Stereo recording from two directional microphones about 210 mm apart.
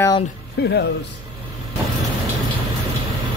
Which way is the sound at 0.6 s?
50° left (ahead or behind).